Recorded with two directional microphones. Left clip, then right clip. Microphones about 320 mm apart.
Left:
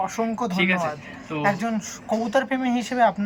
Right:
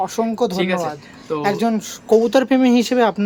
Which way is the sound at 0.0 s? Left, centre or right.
Centre.